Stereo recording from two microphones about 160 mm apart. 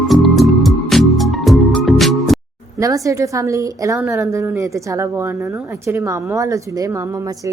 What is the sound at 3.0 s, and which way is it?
A woman's voice, 20° right (ahead or behind).